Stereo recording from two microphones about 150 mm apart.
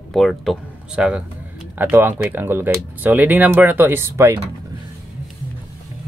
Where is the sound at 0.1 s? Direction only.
Centre (ahead or behind); by 4.3 s 15° right (ahead or behind).